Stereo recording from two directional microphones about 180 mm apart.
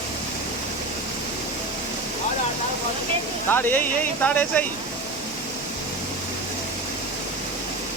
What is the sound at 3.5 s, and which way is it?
Speech, 10° left (ahead or behind).